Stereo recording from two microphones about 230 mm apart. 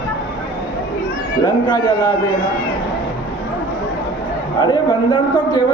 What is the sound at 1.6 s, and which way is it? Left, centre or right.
Speech, centre.